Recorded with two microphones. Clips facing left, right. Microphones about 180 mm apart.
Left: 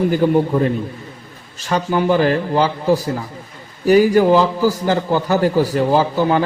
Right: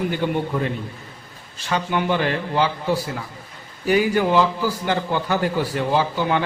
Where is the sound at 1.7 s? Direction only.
40° left (ahead or behind).